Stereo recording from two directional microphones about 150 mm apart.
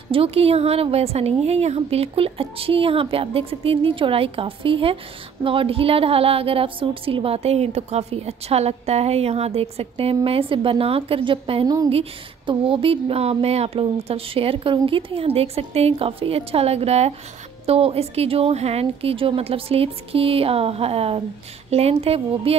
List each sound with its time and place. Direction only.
0.1 s a woman's voice: 40° right (ahead or behind)
11.6 s a woman's voice: 25° right (ahead or behind)
11.9 s a woman's voice: 40° right (ahead or behind)